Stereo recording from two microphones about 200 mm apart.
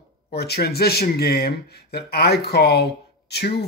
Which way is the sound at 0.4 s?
55° left (ahead or behind).